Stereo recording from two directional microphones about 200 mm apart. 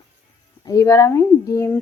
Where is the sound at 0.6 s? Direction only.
15° left (ahead or behind).